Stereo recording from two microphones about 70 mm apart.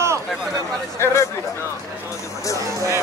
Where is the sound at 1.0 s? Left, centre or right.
Left.